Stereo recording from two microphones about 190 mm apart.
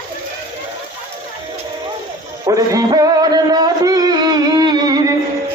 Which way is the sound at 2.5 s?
20° right (ahead or behind).